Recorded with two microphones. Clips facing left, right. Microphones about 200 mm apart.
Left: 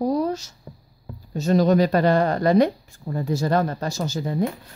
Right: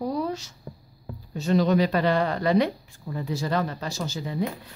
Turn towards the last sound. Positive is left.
turn(degrees=45)  # may be behind; listen again after turning